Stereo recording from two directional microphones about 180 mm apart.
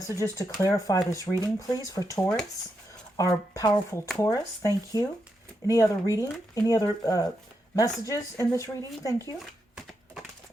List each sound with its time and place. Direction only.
0.1 s speech: 20° left (ahead or behind)